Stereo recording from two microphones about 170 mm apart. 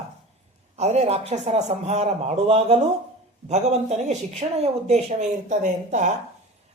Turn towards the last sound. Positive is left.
turn(degrees=-45)  # may be behind; listen again after turning